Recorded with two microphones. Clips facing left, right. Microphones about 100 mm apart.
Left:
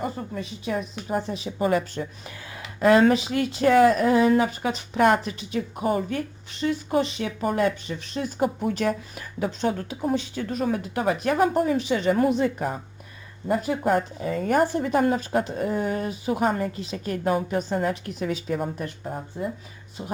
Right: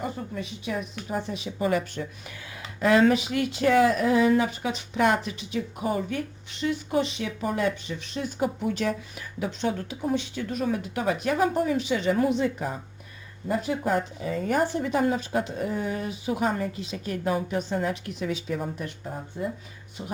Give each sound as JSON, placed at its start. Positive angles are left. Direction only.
{"t": 0.0, "sound": "a woman's voice", "side_deg": 40}